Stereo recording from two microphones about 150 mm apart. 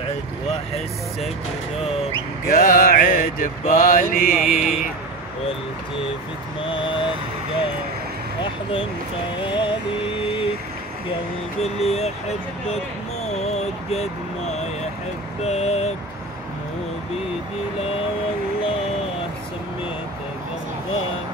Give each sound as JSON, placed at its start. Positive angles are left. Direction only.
{"t": 2.4, "sound": "mantra", "side_deg": 70}
{"t": 6.6, "sound": "vehicle", "side_deg": 35}
{"t": 9.5, "sound": "vehicle", "side_deg": 35}
{"t": 11.6, "sound": "speech", "side_deg": 45}
{"t": 13.3, "sound": "a sound", "side_deg": 45}
{"t": 15.4, "sound": "speech", "side_deg": 45}